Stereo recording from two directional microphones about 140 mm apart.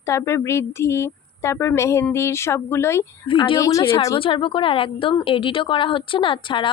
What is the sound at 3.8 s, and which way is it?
A woman's voice, 40° left (ahead or behind).